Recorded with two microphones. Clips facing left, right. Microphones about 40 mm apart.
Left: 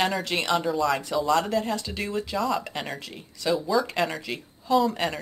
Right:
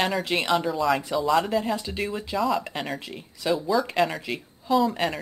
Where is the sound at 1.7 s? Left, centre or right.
Centre.